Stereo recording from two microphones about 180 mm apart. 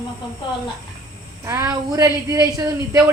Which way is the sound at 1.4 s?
15° right (ahead or behind).